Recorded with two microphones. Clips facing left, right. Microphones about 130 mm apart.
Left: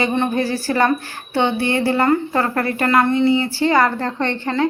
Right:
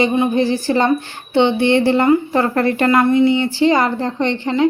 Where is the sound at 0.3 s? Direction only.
20° right (ahead or behind).